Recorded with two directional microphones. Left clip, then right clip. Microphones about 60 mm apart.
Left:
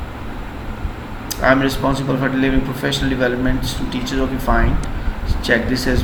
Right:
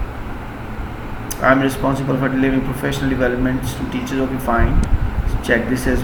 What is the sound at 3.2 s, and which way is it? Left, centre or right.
Speech, centre.